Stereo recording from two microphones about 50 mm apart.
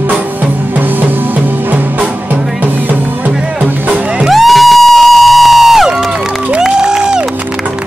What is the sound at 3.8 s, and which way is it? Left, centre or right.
Music, right.